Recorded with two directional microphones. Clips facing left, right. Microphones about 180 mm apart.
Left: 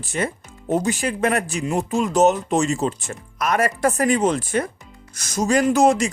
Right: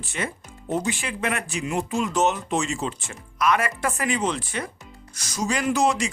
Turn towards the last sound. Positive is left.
turn(degrees=45)  # may be behind; listen again after turning